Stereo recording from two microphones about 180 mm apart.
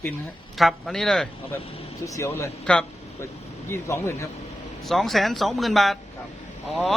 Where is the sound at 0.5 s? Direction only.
Centre (ahead or behind).